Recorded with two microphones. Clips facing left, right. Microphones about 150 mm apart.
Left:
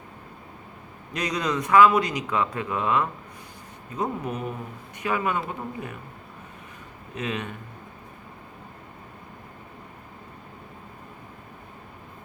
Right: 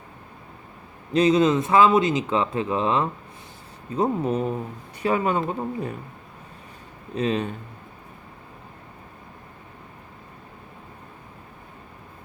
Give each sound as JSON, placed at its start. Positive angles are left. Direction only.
{"t": 1.1, "sound": "speech", "side_deg": -25}
{"t": 7.2, "sound": "speech", "side_deg": -30}